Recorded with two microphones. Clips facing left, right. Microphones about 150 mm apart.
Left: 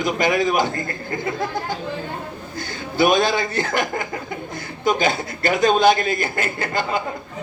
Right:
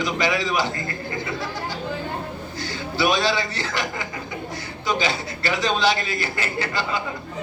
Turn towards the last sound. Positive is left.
turn(degrees=50)  # may be behind; listen again after turning